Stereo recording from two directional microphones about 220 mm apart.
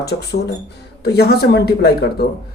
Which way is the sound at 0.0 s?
50° left (ahead or behind).